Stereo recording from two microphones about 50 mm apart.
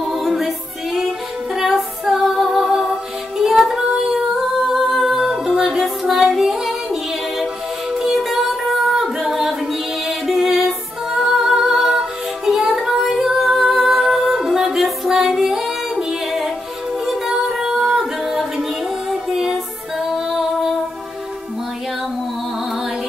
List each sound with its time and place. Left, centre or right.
0.0 s music: centre